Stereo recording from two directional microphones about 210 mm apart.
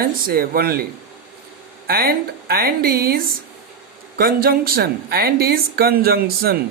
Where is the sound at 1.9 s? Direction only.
45° right (ahead or behind).